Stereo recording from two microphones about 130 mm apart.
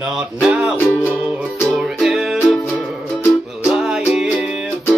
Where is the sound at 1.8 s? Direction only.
5° right (ahead or behind).